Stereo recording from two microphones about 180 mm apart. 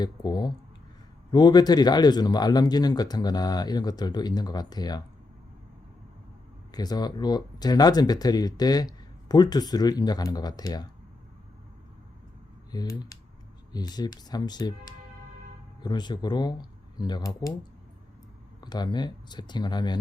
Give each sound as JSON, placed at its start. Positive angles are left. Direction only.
{"t": 0.0, "sound": "speech", "side_deg": 25}
{"t": 6.7, "sound": "speech", "side_deg": 20}
{"t": 12.7, "sound": "speech", "side_deg": 25}
{"t": 15.8, "sound": "speech", "side_deg": 25}
{"t": 18.6, "sound": "speech", "side_deg": 25}